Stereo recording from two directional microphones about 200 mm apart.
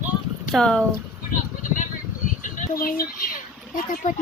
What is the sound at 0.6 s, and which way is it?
Speech, centre (ahead or behind).